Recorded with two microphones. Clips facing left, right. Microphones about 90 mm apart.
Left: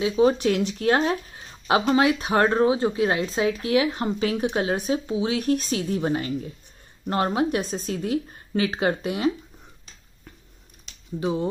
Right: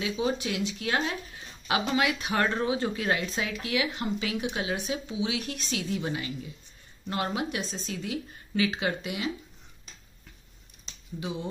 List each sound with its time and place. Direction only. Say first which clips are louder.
0.1 s speech: left 10 dB; 50° left (ahead or behind)
11.1 s speech: left 9 dB; 40° left (ahead or behind)